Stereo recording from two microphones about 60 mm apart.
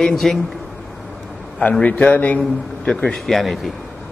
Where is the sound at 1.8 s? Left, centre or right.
Left.